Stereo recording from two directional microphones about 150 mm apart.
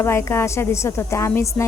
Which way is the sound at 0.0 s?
15° left (ahead or behind).